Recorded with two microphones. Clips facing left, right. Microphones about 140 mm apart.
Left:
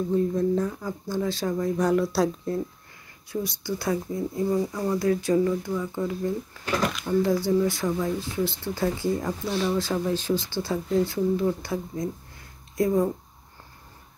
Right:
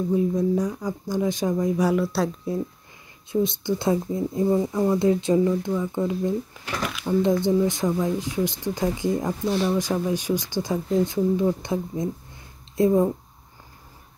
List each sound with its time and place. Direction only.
0.1 s speech: 10° right (ahead or behind)
3.3 s speech: 20° right (ahead or behind)